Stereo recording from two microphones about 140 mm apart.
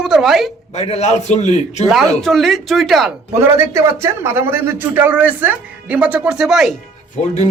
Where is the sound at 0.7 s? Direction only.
50° left (ahead or behind).